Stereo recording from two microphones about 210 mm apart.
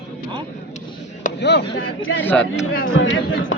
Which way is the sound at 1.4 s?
55° left (ahead or behind).